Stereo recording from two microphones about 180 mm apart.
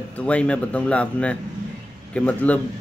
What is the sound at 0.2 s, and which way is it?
A man's voice, 5° left (ahead or behind).